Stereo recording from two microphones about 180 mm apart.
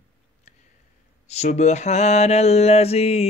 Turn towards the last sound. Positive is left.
turn(degrees=35)  # may be behind; listen again after turning